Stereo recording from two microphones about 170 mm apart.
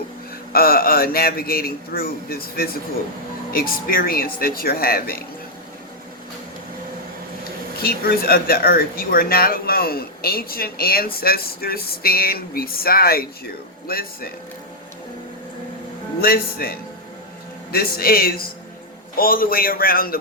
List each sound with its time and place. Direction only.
0.5 s speech: 60° left (ahead or behind)
7.8 s speech: 60° left (ahead or behind)
16.2 s speech: 60° left (ahead or behind)